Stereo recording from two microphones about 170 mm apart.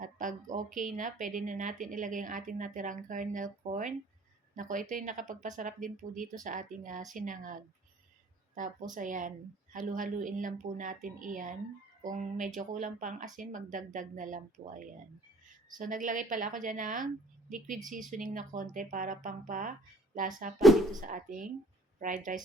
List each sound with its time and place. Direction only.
0.0 s speech: 50° right (ahead or behind)
18.1 s speech: 50° right (ahead or behind)
20.6 s speech: centre (ahead or behind)
21.0 s speech: 50° right (ahead or behind)